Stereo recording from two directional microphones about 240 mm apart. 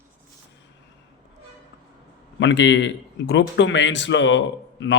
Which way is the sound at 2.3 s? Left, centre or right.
Left.